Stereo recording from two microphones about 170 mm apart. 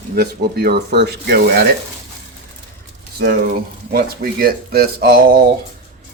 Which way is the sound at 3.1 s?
70° right (ahead or behind).